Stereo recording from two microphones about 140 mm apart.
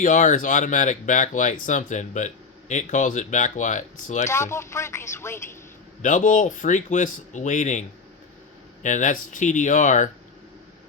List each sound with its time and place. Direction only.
0.0 s speech: 65° left (ahead or behind)
4.3 s speech: 20° left (ahead or behind)
6.0 s speech: 65° left (ahead or behind)